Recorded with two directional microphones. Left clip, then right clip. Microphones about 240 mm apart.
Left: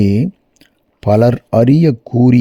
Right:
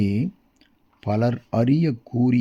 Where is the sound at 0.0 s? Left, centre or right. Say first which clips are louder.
Left 10 dB; left.